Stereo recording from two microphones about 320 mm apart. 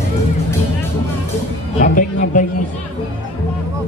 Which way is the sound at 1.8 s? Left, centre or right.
Left.